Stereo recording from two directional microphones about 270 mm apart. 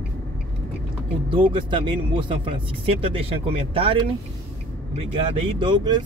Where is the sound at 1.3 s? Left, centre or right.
Centre.